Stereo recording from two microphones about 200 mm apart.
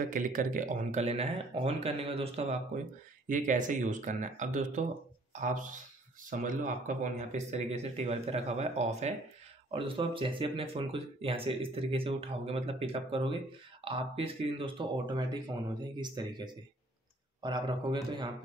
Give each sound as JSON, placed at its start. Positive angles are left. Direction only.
{"t": 0.1, "sound": "speech", "side_deg": -40}
{"t": 3.3, "sound": "speech", "side_deg": -40}